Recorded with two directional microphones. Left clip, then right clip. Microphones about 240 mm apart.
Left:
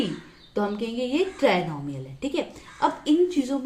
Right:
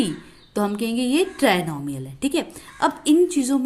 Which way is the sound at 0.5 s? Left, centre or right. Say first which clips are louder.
Right 3 dB; right.